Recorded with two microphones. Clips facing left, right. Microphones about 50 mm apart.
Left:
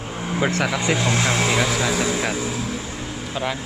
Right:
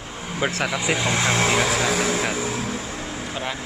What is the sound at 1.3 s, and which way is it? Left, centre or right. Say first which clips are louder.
Speech: even; right.